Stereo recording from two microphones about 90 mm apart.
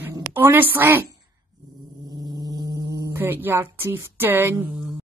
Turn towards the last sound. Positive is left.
turn(degrees=-25)  # may be behind; listen again after turning